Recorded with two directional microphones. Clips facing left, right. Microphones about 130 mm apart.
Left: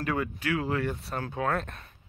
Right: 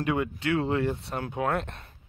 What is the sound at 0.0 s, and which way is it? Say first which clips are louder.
Speech: right 3 dB; 20° right (ahead or behind).